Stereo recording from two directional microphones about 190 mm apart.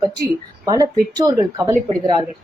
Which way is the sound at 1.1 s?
20° right (ahead or behind).